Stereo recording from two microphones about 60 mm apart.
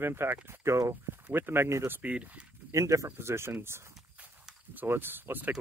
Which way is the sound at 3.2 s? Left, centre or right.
Right.